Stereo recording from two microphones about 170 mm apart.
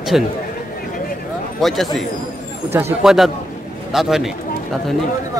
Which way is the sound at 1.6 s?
Centre (ahead or behind).